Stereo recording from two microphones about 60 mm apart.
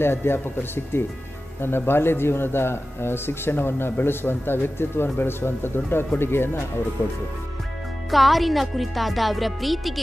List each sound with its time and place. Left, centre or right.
0.0 s a man's voice: left
7.0 s speech: left
8.1 s speech: centre